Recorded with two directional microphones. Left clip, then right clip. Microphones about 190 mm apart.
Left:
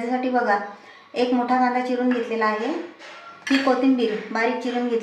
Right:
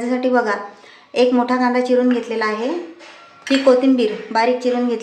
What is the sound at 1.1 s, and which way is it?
Speech, 50° right (ahead or behind).